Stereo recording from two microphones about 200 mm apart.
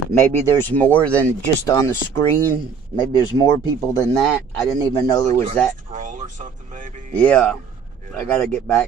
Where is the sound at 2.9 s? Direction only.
20° left (ahead or behind).